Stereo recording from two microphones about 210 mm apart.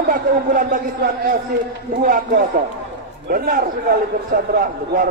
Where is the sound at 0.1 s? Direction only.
40° right (ahead or behind).